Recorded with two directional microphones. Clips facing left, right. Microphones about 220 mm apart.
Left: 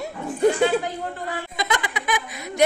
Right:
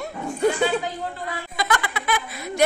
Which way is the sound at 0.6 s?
50° left (ahead or behind).